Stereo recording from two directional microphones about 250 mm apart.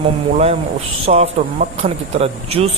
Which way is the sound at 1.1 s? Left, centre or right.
Right.